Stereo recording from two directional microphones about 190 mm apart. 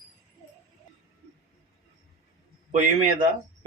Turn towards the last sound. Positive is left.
turn(degrees=-35)  # may be behind; listen again after turning